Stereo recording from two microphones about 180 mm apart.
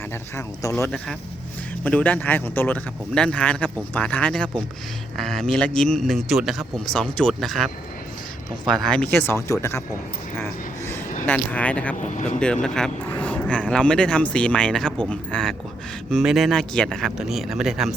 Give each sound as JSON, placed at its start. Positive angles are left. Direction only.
{"t": 0.9, "sound": "speech", "side_deg": 5}
{"t": 10.3, "sound": "a sound", "side_deg": 15}
{"t": 11.3, "sound": "speech", "side_deg": 10}
{"t": 11.9, "sound": "speech", "side_deg": 40}
{"t": 12.6, "sound": "speech", "side_deg": 5}